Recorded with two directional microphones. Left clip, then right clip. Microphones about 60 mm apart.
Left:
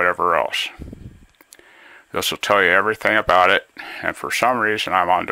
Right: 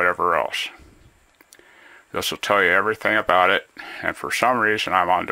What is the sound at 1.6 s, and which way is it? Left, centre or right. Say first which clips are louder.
Speech: left 3 dB; left.